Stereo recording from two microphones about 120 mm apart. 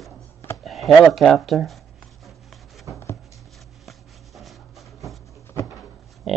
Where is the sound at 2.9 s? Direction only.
20° right (ahead or behind).